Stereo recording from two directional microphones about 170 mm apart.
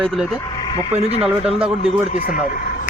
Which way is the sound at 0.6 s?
30° left (ahead or behind).